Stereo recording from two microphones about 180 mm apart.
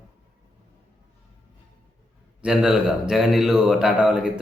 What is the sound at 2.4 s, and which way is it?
Speech, 5° right (ahead or behind).